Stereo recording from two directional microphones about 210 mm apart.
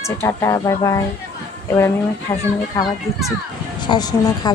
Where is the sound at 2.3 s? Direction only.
20° left (ahead or behind).